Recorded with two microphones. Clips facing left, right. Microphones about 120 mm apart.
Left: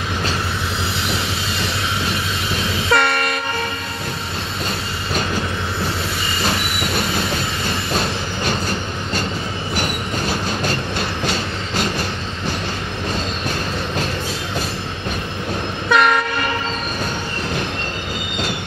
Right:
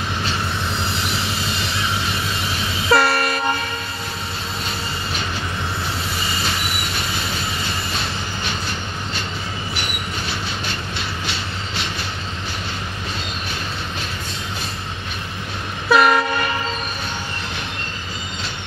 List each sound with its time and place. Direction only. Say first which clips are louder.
2.9 s train: right 2 dB; 5° right (ahead or behind)
9.8 s train: left 5 dB; 45° left (ahead or behind)
15.9 s train: right 1 dB; 5° right (ahead or behind)